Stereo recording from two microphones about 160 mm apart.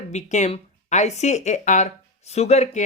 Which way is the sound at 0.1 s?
45° left (ahead or behind).